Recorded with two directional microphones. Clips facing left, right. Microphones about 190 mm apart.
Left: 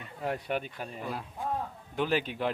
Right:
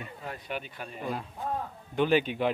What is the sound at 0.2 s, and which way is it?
Speech, 65° left (ahead or behind).